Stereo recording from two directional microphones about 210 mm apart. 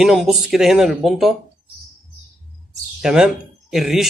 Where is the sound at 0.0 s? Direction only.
Centre (ahead or behind).